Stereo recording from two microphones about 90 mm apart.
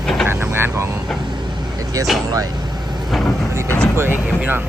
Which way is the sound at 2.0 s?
40° right (ahead or behind).